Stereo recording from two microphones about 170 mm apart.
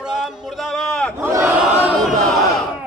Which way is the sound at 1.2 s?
15° right (ahead or behind).